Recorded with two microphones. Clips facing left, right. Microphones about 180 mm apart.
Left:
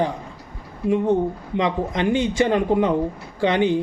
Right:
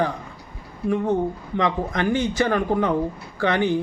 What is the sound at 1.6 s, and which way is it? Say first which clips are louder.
Speech: left 1 dB; 20° left (ahead or behind).